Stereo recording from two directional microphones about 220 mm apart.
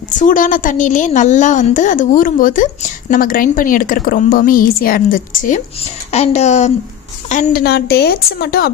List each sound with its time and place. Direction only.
0.1 s a woman's voice: 35° left (ahead or behind)
7.6 s a woman's voice: 45° left (ahead or behind)